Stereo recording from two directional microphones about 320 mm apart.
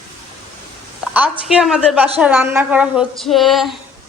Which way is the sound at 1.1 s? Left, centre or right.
Centre.